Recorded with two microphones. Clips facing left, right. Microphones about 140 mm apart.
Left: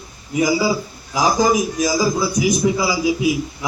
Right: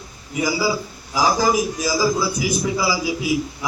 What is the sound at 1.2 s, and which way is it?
A man's voice, 15° left (ahead or behind).